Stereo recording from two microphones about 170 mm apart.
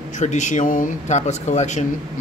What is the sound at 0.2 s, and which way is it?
Speech, 45° left (ahead or behind).